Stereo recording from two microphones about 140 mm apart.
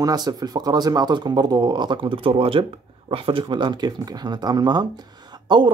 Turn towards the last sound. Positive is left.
turn(degrees=-30)  # may be behind; listen again after turning